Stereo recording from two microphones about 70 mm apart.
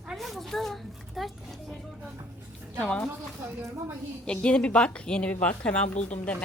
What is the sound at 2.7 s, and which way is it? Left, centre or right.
Speech, centre.